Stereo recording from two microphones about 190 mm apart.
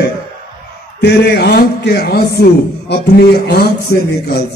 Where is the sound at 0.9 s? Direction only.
60° left (ahead or behind).